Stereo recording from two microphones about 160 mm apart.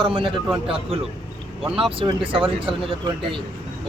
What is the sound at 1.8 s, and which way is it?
Speech, 35° right (ahead or behind).